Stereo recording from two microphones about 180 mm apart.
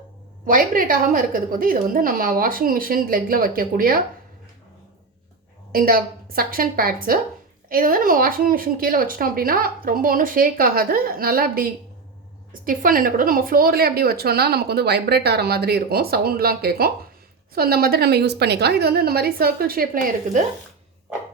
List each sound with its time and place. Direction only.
0.4 s speech: 50° right (ahead or behind)
5.7 s speech: 55° right (ahead or behind)